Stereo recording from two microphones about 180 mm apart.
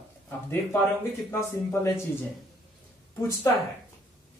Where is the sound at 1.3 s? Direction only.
15° left (ahead or behind).